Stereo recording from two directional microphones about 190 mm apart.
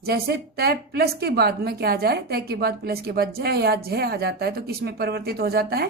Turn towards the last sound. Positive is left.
turn(degrees=-55)  # may be behind; listen again after turning